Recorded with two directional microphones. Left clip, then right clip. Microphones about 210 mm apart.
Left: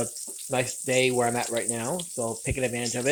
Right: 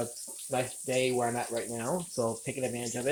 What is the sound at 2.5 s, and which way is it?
Speech, 25° left (ahead or behind).